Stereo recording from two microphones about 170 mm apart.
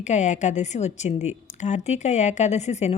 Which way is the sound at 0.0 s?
45° left (ahead or behind).